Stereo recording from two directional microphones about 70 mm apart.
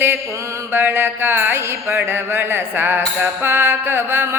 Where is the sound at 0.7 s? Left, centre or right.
Right.